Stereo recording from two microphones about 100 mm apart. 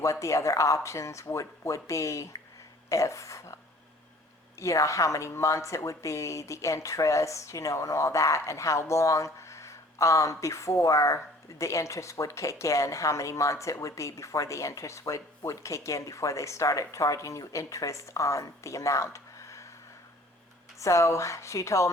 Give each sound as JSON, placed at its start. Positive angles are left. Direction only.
{"t": 0.0, "sound": "a woman's voice", "side_deg": 30}
{"t": 20.7, "sound": "a woman's voice", "side_deg": 30}